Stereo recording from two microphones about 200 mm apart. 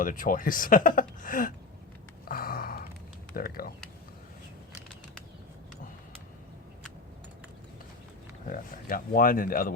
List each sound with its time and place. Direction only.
0.0 s speech: 45° left (ahead or behind)
2.2 s a sound: 45° left (ahead or behind)
3.3 s speech: 50° left (ahead or behind)
8.4 s speech: 45° left (ahead or behind)